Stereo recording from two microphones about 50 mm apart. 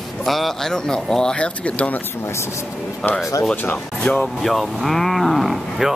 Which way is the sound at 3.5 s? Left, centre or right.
Left.